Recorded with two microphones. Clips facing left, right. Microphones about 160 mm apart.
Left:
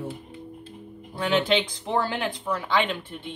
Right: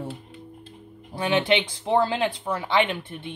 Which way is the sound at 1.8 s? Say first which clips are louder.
Right 4 dB; 20° right (ahead or behind).